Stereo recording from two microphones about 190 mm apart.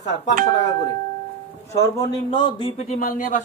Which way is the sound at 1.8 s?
20° left (ahead or behind).